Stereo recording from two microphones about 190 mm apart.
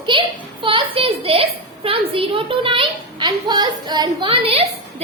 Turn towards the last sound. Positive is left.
turn(degrees=-30)  # may be behind; listen again after turning